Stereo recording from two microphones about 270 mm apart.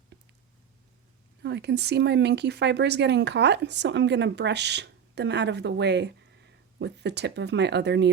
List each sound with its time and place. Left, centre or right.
1.4 s speech: right